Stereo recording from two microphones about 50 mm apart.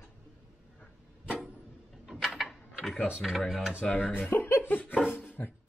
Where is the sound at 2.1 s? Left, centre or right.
Centre.